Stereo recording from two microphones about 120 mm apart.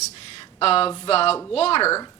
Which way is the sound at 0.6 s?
55° left (ahead or behind).